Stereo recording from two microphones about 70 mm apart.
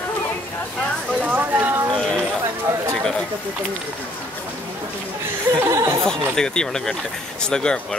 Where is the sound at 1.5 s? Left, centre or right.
Right.